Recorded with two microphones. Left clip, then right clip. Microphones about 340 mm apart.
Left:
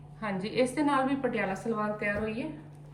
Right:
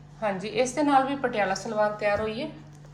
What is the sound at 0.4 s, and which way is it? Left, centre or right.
A woman's voice, centre.